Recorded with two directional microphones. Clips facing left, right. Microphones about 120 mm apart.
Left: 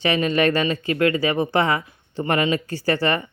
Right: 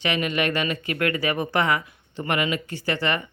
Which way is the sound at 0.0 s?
30° left (ahead or behind).